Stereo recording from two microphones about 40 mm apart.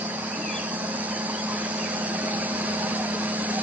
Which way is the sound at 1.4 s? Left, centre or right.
Right.